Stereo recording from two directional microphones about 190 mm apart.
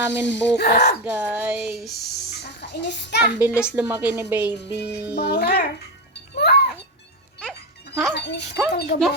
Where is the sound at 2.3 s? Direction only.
65° left (ahead or behind).